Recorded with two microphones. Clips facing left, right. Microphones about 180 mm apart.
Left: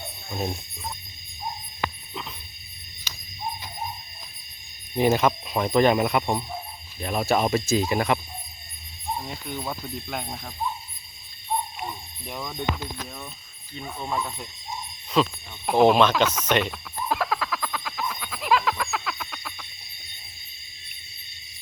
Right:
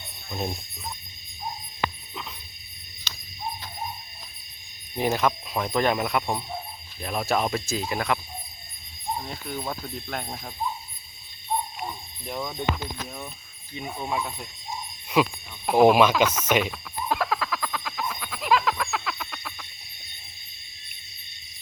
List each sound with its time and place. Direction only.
4.9 s speech: centre (ahead or behind)
7.9 s cricket: 20° left (ahead or behind)
9.1 s speech: centre (ahead or behind)
12.2 s speech: centre (ahead or behind)
13.7 s speech: 10° right (ahead or behind)
15.6 s a sound: 5° right (ahead or behind)